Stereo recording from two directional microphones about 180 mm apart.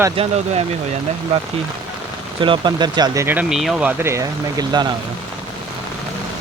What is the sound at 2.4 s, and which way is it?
Speech, 25° right (ahead or behind).